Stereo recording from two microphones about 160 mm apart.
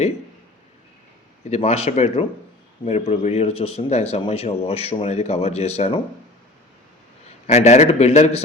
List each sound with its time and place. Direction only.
1.5 s speech: 40° left (ahead or behind)
7.4 s speech: 45° left (ahead or behind)